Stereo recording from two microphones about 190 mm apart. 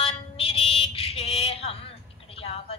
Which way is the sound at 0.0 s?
30° left (ahead or behind).